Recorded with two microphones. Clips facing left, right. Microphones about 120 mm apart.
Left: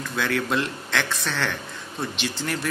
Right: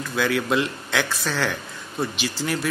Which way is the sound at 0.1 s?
Centre (ahead or behind).